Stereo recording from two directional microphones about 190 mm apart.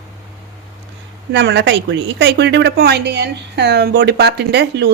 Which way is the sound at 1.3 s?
70° right (ahead or behind).